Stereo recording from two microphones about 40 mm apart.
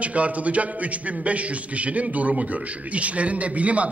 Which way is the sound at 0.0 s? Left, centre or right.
Right.